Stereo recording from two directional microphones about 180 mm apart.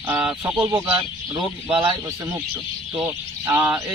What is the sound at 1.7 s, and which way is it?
Speech, 25° right (ahead or behind).